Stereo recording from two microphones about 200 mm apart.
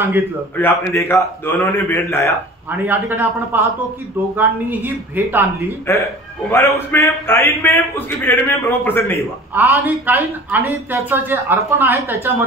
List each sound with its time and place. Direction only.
0.6 s a man's voice: 10° left (ahead or behind)
2.7 s a woman's voice: 10° right (ahead or behind)
5.9 s a man's voice: 15° left (ahead or behind)
9.5 s a woman's voice: 10° right (ahead or behind)